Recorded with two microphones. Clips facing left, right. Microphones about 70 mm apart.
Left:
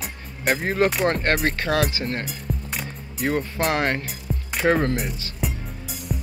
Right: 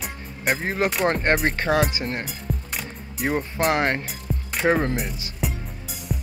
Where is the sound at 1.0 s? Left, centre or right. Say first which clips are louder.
Even; centre.